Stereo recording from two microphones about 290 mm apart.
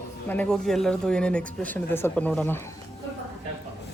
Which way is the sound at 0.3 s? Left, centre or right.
Centre.